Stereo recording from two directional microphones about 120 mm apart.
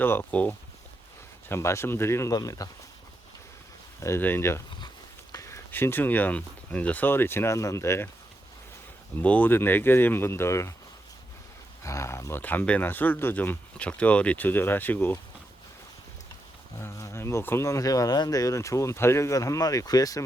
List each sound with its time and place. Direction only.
0.0 s speech: 15° left (ahead or behind)
4.0 s speech: 20° left (ahead or behind)
9.2 s speech: 10° left (ahead or behind)
11.8 s speech: 25° left (ahead or behind)
16.8 s speech: 20° left (ahead or behind)